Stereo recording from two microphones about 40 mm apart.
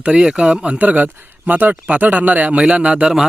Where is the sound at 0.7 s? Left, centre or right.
Right.